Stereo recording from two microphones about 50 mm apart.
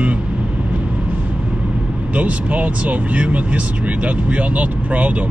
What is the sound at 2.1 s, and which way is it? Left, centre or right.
Speech, right.